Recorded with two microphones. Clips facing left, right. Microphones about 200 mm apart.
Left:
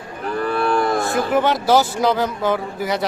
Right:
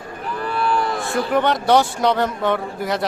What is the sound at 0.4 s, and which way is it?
Cattle, 50° left (ahead or behind).